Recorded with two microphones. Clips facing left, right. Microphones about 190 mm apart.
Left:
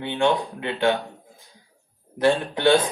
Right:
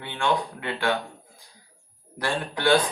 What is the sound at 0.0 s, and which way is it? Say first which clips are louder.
Speech: left 4 dB; 20° left (ahead or behind).